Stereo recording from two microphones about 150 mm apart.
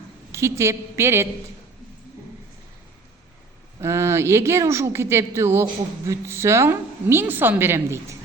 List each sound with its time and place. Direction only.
0.3 s a woman's voice: 20° right (ahead or behind)
3.8 s a woman's voice: 20° right (ahead or behind)